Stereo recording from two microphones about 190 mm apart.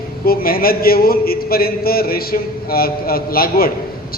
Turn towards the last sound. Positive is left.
turn(degrees=50)  # may be behind; listen again after turning